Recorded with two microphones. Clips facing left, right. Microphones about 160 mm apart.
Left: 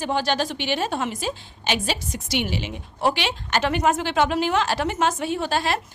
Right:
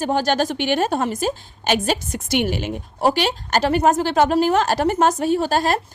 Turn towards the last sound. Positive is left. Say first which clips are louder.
# right 5 dB
turn(degrees=-40)  # may be behind; listen again after turning